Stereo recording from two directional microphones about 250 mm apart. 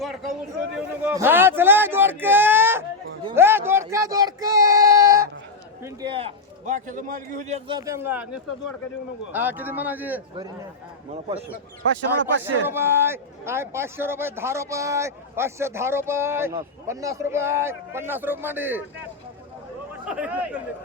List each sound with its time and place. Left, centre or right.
1.0 s a sound: centre
5.8 s a man's voice: centre
12.2 s speech: right
12.6 s a man's voice: centre
20.1 s speech: centre